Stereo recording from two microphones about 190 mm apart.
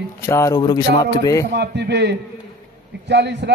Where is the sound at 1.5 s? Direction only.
65° right (ahead or behind).